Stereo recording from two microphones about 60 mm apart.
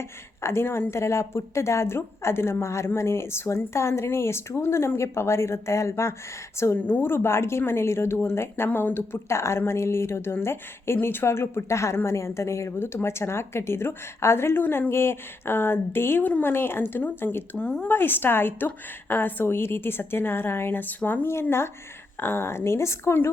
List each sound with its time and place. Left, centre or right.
0.0 s a woman's voice: left